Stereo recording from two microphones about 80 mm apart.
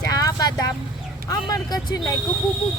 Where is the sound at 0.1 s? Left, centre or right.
Left.